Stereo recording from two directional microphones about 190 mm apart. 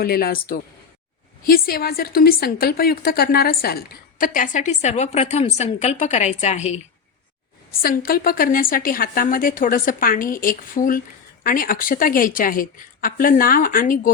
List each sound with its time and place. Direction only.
0.0 s a woman's voice: 55° left (ahead or behind); by 6.7 s 35° left (ahead or behind)
7.8 s a woman's voice: 50° left (ahead or behind)